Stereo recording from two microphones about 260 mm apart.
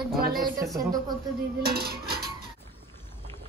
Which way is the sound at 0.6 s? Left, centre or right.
Centre.